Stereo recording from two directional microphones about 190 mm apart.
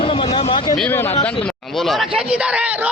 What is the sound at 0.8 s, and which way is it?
Speech, 10° left (ahead or behind).